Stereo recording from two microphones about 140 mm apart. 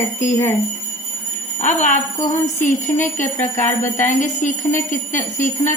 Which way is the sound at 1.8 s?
60° left (ahead or behind).